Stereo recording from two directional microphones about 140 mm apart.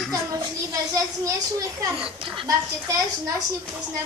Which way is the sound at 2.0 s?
5° right (ahead or behind).